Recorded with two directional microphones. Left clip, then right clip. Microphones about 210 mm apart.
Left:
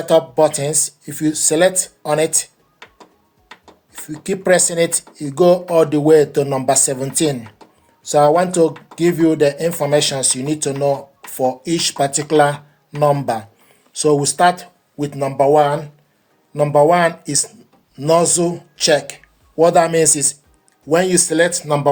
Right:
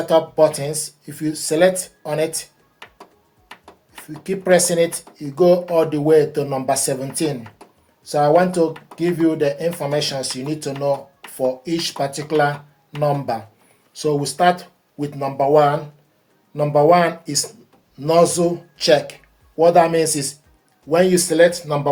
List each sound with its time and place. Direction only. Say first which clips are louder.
0.0 s speech: left 2 dB; 45° left (ahead or behind)
4.2 s speech: left 1 dB; 45° left (ahead or behind)